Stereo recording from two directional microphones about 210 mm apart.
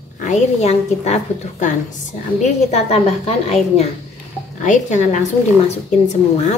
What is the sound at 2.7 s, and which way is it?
A woman's voice, 30° left (ahead or behind).